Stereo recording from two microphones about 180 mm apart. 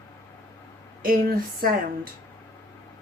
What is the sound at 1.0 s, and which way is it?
Speech, 55° right (ahead or behind).